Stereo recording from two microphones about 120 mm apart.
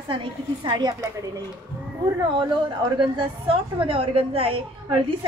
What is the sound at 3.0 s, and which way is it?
A woman's voice, 45° right (ahead or behind).